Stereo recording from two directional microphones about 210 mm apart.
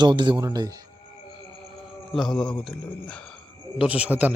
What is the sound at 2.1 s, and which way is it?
A man's voice, centre (ahead or behind).